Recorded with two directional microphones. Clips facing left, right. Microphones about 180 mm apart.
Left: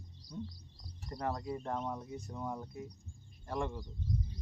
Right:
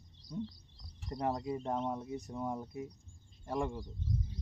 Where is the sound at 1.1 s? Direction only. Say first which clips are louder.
Right 3 dB; 20° right (ahead or behind).